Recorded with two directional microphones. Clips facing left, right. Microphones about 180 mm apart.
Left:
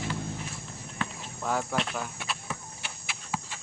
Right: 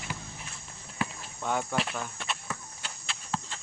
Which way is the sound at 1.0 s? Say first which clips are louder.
Right 2 dB; 10° right (ahead or behind).